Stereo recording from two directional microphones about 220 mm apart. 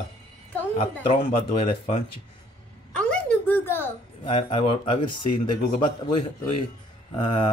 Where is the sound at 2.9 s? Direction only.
5° left (ahead or behind).